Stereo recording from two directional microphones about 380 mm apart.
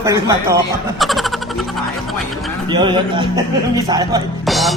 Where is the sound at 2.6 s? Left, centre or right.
Centre.